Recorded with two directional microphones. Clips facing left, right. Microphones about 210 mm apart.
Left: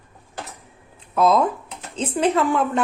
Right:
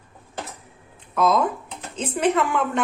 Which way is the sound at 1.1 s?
30° left (ahead or behind).